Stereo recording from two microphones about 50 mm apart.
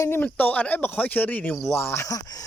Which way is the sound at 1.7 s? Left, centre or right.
Left.